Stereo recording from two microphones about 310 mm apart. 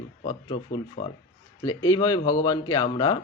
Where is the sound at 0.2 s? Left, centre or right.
Centre.